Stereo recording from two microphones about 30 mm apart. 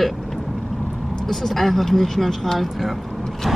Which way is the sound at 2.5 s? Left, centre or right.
Centre.